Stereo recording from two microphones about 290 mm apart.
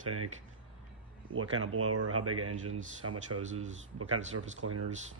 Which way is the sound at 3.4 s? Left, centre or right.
Right.